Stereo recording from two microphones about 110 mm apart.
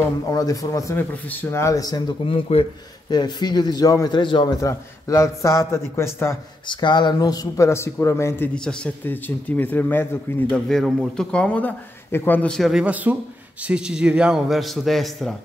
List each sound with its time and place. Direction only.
0.3 s speech: 30° left (ahead or behind)
2.2 s speech: 60° left (ahead or behind)
3.1 s a man's voice: 40° left (ahead or behind)
4.6 s speech: 30° left (ahead or behind)
6.7 s speech: 45° left (ahead or behind); by 8.5 s 25° left (ahead or behind)
8.5 s a man's voice: 5° left (ahead or behind)
9.0 s a man's voice: 15° left (ahead or behind)
10.5 s a man's voice: 5° left (ahead or behind)
12.8 s a man's voice: 15° right (ahead or behind)